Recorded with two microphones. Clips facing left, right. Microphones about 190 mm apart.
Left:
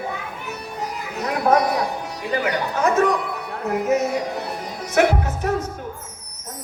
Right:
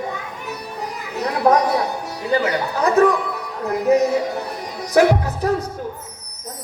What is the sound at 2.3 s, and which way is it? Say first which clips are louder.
Speech: right 2 dB; 35° right (ahead or behind).